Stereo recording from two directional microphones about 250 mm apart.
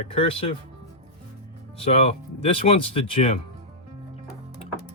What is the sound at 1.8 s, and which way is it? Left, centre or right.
Speech, left.